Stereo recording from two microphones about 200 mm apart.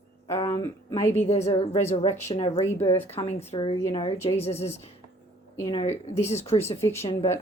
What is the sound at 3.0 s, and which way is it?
A woman's voice, 30° left (ahead or behind).